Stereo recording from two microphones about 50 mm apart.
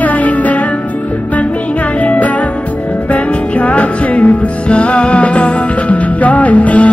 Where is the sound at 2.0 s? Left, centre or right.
Left.